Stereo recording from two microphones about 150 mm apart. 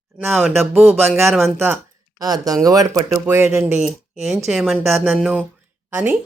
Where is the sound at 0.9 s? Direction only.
15° right (ahead or behind).